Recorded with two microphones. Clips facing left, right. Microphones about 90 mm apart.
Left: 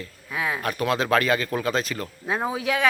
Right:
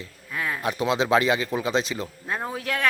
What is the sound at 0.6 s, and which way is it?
Speech, 20° right (ahead or behind).